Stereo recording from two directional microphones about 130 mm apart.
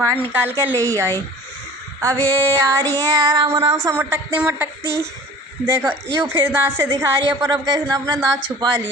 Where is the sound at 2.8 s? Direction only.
30° right (ahead or behind).